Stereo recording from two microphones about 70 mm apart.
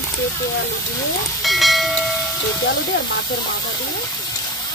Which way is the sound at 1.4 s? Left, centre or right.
Centre.